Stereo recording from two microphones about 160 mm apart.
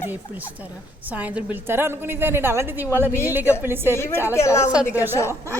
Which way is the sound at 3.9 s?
15° left (ahead or behind).